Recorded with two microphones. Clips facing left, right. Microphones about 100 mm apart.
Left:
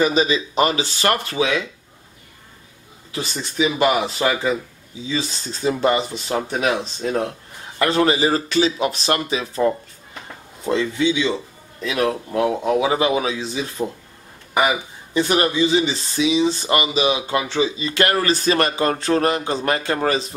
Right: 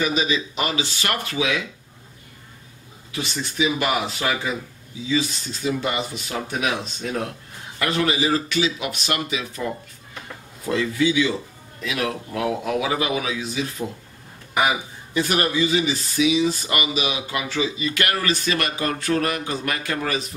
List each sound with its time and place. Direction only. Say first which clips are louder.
0.0 s speech: left 5 dB; 35° left (ahead or behind)
3.1 s speech: left 1 dB; 35° left (ahead or behind)
15.1 s speech: left 3 dB; 25° left (ahead or behind)